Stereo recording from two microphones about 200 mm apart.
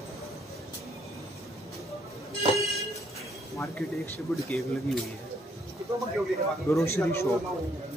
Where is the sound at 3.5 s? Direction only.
10° left (ahead or behind).